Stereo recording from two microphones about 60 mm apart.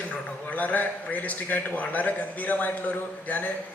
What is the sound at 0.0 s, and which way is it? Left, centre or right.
A man's voice, left.